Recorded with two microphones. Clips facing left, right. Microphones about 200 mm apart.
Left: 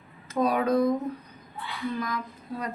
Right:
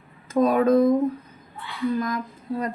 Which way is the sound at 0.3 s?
45° right (ahead or behind).